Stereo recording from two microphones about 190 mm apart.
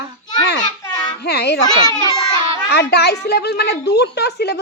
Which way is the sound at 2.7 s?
60° left (ahead or behind).